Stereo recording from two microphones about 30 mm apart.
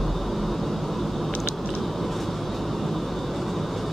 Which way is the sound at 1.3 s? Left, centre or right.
Left.